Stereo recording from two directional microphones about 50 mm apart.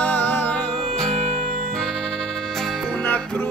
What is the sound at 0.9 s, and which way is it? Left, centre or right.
Music, centre.